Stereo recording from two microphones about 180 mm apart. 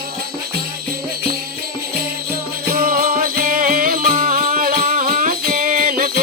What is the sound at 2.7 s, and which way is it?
Music, 55° right (ahead or behind).